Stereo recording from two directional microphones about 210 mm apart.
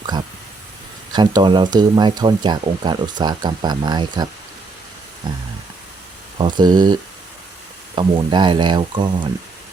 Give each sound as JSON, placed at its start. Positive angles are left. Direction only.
{"t": 1.1, "sound": "speech", "side_deg": -20}
{"t": 6.4, "sound": "speech", "side_deg": -20}